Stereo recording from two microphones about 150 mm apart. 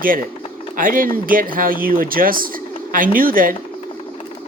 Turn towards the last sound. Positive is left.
turn(degrees=-70)  # may be behind; listen again after turning